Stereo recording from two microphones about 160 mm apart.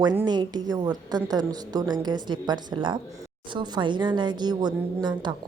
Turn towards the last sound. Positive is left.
turn(degrees=-25)  # may be behind; listen again after turning